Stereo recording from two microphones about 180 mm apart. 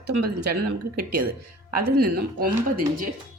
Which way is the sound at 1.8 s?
60° right (ahead or behind).